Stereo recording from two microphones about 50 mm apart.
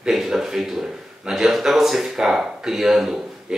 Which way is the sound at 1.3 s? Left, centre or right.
Centre.